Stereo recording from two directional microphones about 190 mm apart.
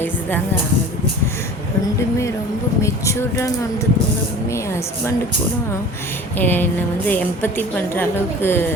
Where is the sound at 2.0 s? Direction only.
15° left (ahead or behind).